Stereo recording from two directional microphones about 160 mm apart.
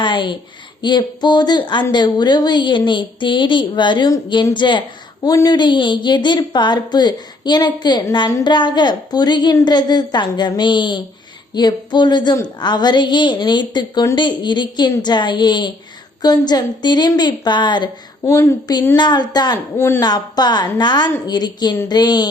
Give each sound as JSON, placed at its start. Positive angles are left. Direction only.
{"t": 0.0, "sound": "a sound", "side_deg": 30}
{"t": 0.8, "sound": "a woman's voice", "side_deg": 25}
{"t": 18.3, "sound": "speech", "side_deg": 15}
{"t": 18.9, "sound": "a woman's voice", "side_deg": 25}
{"t": 19.7, "sound": "speech", "side_deg": 15}
{"t": 20.0, "sound": "a woman's voice", "side_deg": 25}